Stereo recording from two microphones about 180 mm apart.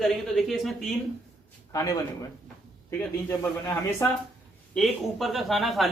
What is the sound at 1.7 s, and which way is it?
A man's voice, 20° left (ahead or behind).